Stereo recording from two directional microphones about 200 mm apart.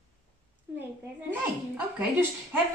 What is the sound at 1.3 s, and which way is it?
Speech, 10° right (ahead or behind).